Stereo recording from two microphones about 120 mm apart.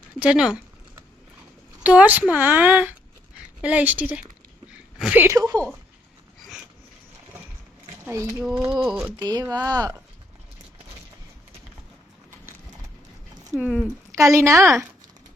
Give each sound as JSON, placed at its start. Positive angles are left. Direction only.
{"t": 0.2, "sound": "speech", "side_deg": -5}
{"t": 1.8, "sound": "speech", "side_deg": -10}
{"t": 5.1, "sound": "speech", "side_deg": -20}
{"t": 5.4, "sound": "speech", "side_deg": -30}
{"t": 8.0, "sound": "speech", "side_deg": -20}
{"t": 8.4, "sound": "speech", "side_deg": -5}
{"t": 9.1, "sound": "speech", "side_deg": -35}
{"t": 13.6, "sound": "speech", "side_deg": -5}
{"t": 14.2, "sound": "speech", "side_deg": -25}